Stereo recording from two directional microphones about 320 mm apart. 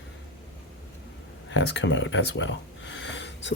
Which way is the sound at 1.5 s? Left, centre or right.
Left.